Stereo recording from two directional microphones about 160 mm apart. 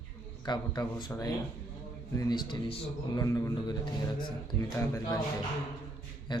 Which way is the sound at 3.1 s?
20° left (ahead or behind).